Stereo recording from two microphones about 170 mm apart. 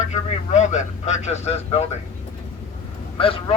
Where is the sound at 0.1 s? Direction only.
45° left (ahead or behind).